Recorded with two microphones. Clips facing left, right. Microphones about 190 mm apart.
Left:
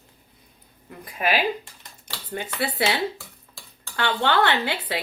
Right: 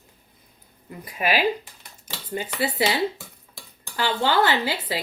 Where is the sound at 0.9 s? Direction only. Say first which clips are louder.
Even; 5° right (ahead or behind).